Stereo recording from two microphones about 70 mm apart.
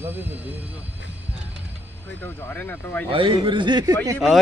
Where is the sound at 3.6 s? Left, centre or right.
Right.